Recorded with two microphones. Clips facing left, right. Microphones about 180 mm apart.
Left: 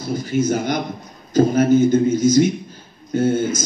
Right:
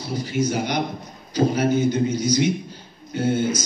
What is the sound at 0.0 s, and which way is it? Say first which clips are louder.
A man's voice: left 4 dB; 45° left (ahead or behind).